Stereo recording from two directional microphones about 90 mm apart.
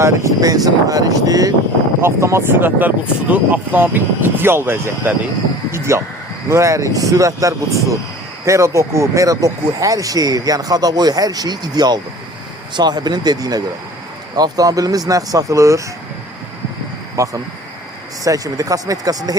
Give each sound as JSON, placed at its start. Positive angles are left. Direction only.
{"t": 0.0, "sound": "speech", "side_deg": -35}
{"t": 2.0, "sound": "speech", "side_deg": -30}
{"t": 17.2, "sound": "speech", "side_deg": -40}